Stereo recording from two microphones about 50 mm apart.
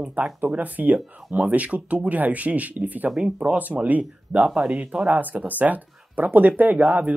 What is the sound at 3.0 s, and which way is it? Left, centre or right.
Speech, centre.